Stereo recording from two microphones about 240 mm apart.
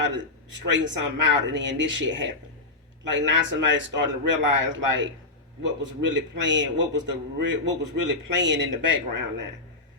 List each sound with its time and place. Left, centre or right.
0.7 s a man's voice: right